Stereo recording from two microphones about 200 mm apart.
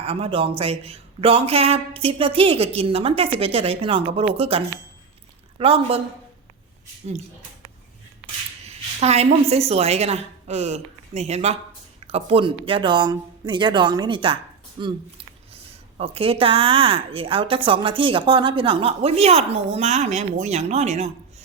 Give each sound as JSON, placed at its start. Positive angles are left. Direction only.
{"t": 0.0, "sound": "a woman's voice", "side_deg": -30}
{"t": 8.6, "sound": "a woman's voice", "side_deg": -30}
{"t": 16.0, "sound": "a woman's voice", "side_deg": -30}